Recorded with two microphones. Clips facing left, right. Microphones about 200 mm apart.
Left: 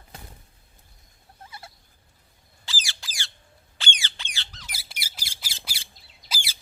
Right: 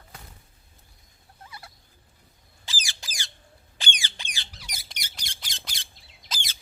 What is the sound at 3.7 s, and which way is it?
Squawk, 15° right (ahead or behind).